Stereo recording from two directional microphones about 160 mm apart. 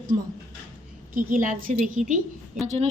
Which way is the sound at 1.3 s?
55° right (ahead or behind).